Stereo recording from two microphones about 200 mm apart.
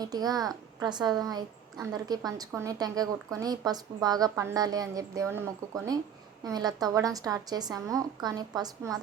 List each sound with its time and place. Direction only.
0.0 s a woman's voice: 20° right (ahead or behind)